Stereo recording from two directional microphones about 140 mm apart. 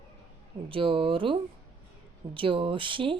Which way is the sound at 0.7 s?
40° right (ahead or behind).